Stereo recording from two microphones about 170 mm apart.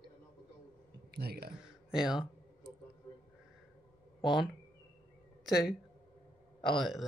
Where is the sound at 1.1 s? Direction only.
70° right (ahead or behind).